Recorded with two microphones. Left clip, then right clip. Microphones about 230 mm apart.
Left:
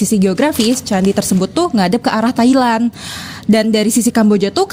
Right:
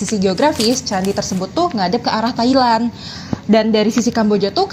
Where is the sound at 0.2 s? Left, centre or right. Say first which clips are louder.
Right 1 dB; left.